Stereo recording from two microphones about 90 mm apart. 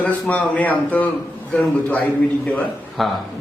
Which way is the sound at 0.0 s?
15° left (ahead or behind).